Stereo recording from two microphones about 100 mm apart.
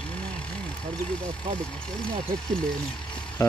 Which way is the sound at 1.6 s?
10° left (ahead or behind).